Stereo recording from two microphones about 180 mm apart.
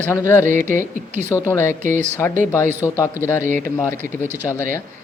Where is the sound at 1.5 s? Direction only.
15° left (ahead or behind).